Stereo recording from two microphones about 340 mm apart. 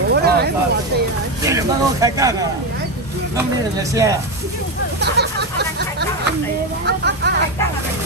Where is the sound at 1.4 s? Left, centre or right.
Centre.